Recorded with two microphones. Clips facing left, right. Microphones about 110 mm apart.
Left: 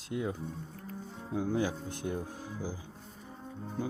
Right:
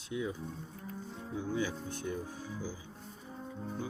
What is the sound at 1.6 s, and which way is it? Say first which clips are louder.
Speech: left 3 dB; 45° left (ahead or behind).